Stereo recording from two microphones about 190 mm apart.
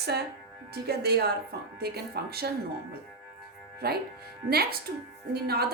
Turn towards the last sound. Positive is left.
turn(degrees=-55)  # may be behind; listen again after turning